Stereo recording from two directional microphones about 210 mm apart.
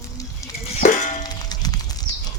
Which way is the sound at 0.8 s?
35° left (ahead or behind).